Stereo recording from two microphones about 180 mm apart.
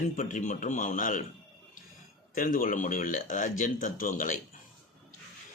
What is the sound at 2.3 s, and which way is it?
A man's voice, 50° left (ahead or behind).